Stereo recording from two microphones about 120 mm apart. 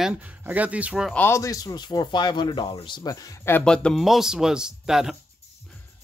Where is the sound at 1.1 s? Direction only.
20° left (ahead or behind).